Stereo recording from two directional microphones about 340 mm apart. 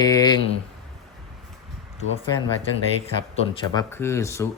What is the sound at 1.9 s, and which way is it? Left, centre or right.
Speech, centre.